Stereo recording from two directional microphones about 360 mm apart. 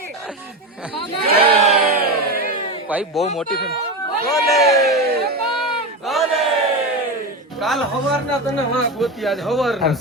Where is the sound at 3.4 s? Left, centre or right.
Left.